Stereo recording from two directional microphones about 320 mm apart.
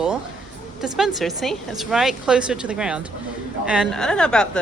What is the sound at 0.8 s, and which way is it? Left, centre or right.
A woman's voice, centre.